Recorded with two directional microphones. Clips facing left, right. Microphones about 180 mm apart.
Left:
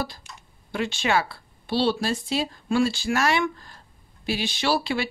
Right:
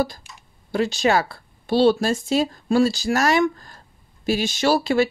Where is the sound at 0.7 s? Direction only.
40° right (ahead or behind).